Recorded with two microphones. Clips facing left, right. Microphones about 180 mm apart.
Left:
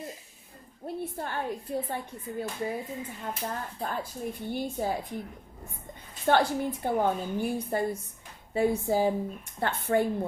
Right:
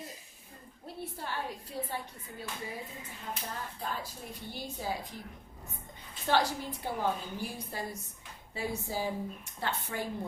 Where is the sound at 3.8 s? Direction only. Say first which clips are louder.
Left 7 dB; 50° left (ahead or behind).